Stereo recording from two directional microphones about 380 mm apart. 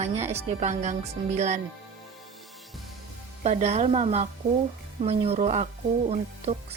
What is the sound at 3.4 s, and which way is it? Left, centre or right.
Speech, centre.